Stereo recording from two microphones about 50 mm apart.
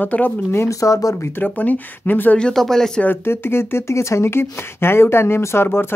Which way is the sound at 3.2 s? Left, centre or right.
Left.